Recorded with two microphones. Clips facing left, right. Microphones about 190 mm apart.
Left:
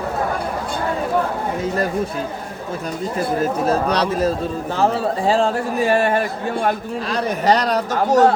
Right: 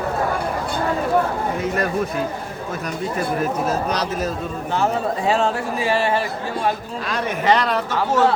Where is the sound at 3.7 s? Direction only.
30° left (ahead or behind).